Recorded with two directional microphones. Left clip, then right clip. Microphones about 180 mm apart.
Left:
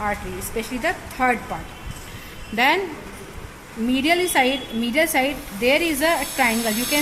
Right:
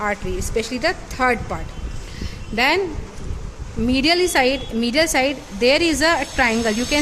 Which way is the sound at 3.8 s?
25° right (ahead or behind).